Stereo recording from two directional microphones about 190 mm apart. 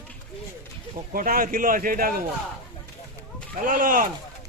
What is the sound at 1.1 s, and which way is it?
A man's voice, 45° right (ahead or behind).